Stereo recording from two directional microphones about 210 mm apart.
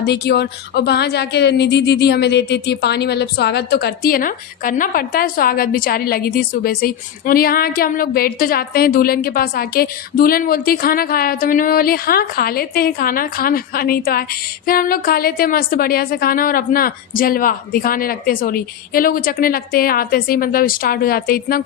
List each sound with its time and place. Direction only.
0.0 s a woman's voice: 50° left (ahead or behind)